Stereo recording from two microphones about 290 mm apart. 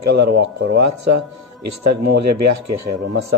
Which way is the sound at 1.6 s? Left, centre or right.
Right.